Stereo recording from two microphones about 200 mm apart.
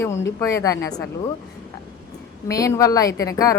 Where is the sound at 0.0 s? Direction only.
15° left (ahead or behind).